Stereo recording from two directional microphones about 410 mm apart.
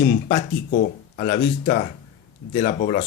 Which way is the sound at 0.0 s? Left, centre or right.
Left.